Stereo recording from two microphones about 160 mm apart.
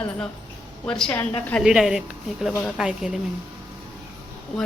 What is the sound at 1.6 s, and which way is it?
Speech, 5° right (ahead or behind).